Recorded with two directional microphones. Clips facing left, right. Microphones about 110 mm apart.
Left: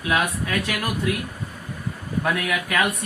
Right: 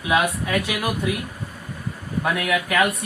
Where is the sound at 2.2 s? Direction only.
5° right (ahead or behind).